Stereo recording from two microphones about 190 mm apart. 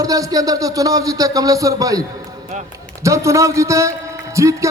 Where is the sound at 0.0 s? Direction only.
20° right (ahead or behind).